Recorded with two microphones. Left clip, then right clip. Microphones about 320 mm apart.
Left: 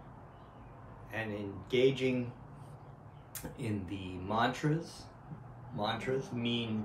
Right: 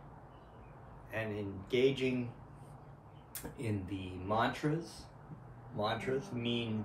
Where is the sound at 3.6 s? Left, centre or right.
Centre.